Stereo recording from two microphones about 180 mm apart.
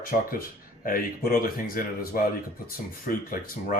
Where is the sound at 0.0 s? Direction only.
50° left (ahead or behind).